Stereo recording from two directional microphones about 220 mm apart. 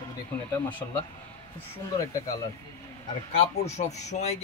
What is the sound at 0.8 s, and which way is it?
Speech, 20° left (ahead or behind).